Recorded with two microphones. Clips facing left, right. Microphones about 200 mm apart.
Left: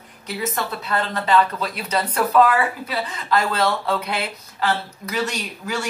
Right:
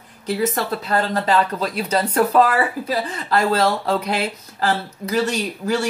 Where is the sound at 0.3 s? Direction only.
40° right (ahead or behind).